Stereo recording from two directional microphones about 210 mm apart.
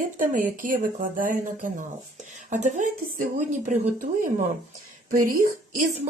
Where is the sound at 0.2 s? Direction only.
40° right (ahead or behind).